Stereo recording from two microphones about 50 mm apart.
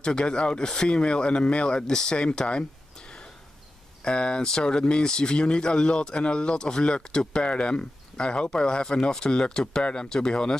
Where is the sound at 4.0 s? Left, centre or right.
Centre.